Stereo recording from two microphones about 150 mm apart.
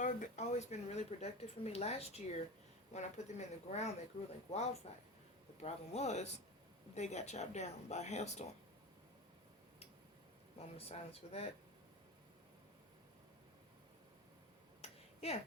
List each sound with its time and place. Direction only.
0.0 s a woman's voice: 55° left (ahead or behind)
10.6 s a woman's voice: 40° left (ahead or behind)
14.8 s finger snapping: 45° left (ahead or behind)